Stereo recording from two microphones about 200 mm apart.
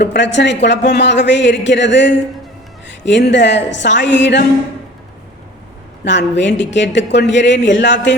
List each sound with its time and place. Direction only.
0.0 s a woman's voice: 60° left (ahead or behind)
6.1 s a woman's voice: 65° left (ahead or behind)